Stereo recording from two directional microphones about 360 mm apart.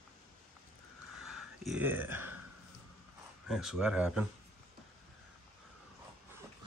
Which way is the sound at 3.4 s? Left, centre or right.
Centre.